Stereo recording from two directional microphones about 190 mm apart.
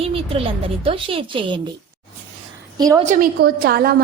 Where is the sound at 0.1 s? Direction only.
30° right (ahead or behind).